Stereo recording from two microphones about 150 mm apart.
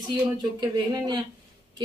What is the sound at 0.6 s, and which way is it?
Speech, 25° right (ahead or behind).